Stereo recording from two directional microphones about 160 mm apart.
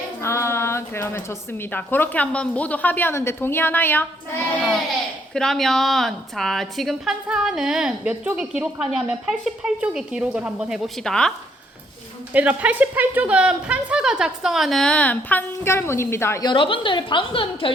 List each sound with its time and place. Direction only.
0.2 s a woman's voice: 15° left (ahead or behind)
5.3 s a woman's voice: 5° left (ahead or behind)
12.3 s a woman's voice: 10° right (ahead or behind); by 16.5 s 15° left (ahead or behind)
16.5 s a woman's voice: 30° left (ahead or behind)